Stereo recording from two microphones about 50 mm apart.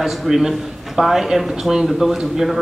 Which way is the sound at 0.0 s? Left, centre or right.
Centre.